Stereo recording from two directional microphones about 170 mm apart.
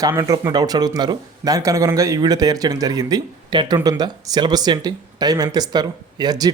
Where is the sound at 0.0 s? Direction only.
20° right (ahead or behind).